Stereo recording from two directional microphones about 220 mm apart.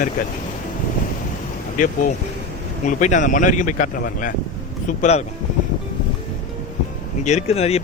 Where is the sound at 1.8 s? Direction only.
35° left (ahead or behind).